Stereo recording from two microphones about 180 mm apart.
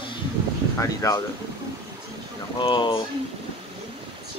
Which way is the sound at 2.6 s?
30° left (ahead or behind).